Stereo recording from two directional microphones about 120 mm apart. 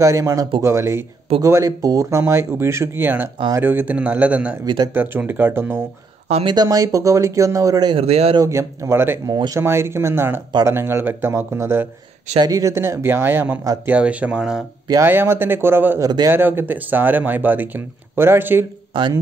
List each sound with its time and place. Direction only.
0.0 s speech: 25° right (ahead or behind)
4.6 s speech: 40° right (ahead or behind)
4.9 s speech: 15° right (ahead or behind)
6.4 s speech: 35° right (ahead or behind)
7.9 s speech: 55° right (ahead or behind)
8.4 s speech: 25° right (ahead or behind)
9.3 s speech: 35° right (ahead or behind)
9.6 s speech: 20° right (ahead or behind)
12.4 s speech: 30° right (ahead or behind); by 14.6 s 10° right (ahead or behind)
15.0 s speech: 20° right (ahead or behind)
16.0 s speech: 35° right (ahead or behind)
16.3 s speech: 20° right (ahead or behind)
18.9 s speech: 45° right (ahead or behind)